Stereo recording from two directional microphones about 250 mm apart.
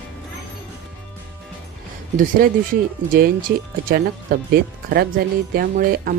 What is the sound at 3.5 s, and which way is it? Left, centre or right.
Speech, right.